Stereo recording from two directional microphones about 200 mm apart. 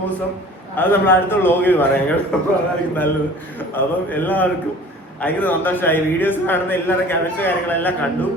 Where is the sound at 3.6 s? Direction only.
10° left (ahead or behind).